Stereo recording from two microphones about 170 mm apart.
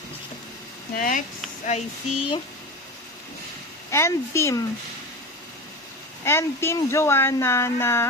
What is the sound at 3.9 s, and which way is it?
Speech, 15° left (ahead or behind).